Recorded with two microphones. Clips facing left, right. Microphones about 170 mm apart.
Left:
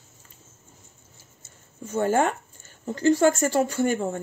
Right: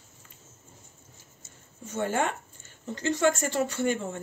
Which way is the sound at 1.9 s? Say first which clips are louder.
Left 6 dB; 45° left (ahead or behind).